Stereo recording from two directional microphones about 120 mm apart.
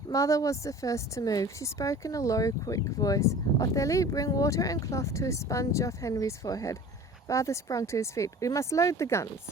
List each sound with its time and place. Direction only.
0.1 s speech: 25° left (ahead or behind)